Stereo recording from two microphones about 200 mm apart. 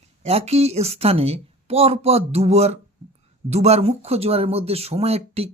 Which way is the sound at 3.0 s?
30° right (ahead or behind).